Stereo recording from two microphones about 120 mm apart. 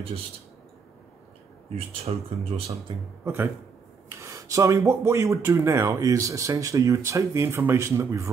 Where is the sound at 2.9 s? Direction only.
40° right (ahead or behind).